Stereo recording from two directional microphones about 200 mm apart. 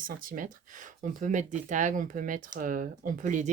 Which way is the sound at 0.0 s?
45° right (ahead or behind).